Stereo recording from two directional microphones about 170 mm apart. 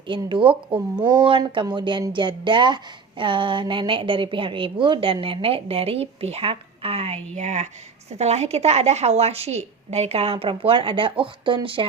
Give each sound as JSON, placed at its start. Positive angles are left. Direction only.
{"t": 0.1, "sound": "a woman's voice", "side_deg": -30}